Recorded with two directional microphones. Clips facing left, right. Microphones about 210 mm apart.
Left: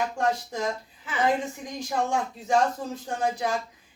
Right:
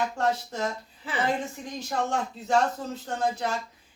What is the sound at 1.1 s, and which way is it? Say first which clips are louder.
Speech: right 1 dB; 35° right (ahead or behind).